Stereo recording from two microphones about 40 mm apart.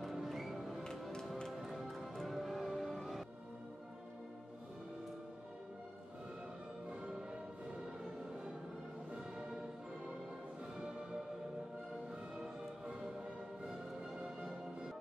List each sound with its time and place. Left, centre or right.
0.0 s music: centre
7.1 s music: centre
12.4 s music: right